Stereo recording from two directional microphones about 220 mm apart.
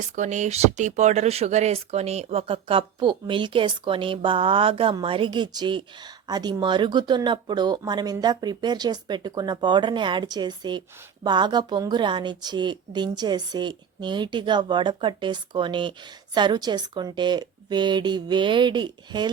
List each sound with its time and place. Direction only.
0.0 s speech: 35° right (ahead or behind)